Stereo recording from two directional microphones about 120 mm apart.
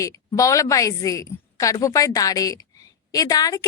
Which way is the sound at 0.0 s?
25° left (ahead or behind).